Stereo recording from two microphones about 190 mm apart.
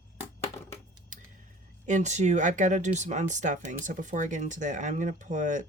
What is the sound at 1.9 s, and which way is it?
Speech, 40° right (ahead or behind).